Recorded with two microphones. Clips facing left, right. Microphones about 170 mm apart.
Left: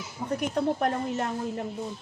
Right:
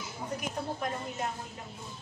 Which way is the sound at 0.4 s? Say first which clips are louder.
Left 11 dB; 65° left (ahead or behind).